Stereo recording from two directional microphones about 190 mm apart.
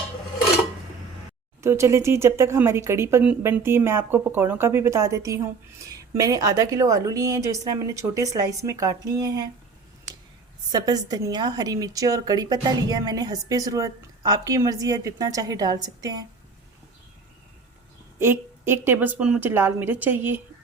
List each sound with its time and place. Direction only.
1.6 s a woman's voice: 15° right (ahead or behind)
10.7 s a woman's voice: 20° right (ahead or behind)
18.2 s a woman's voice: 10° right (ahead or behind)